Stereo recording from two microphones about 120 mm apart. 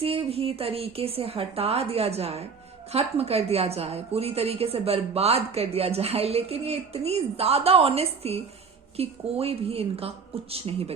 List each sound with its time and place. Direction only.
0.0 s a woman's voice: 55° right (ahead or behind)